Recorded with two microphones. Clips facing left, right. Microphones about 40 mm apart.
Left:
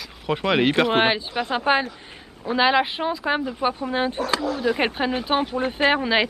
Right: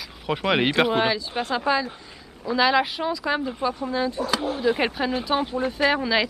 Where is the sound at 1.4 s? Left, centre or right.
Left.